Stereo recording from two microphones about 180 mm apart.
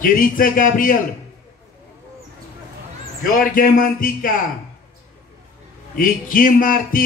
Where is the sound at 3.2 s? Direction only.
50° left (ahead or behind).